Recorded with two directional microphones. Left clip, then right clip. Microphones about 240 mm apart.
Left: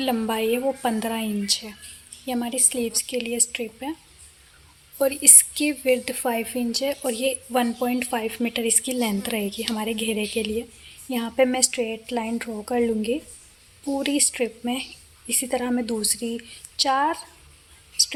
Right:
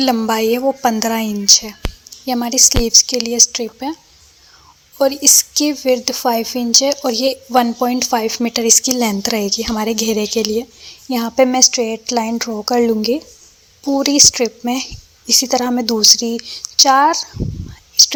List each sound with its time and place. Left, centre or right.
0.0 s a woman's voice: right
4.9 s a woman's voice: centre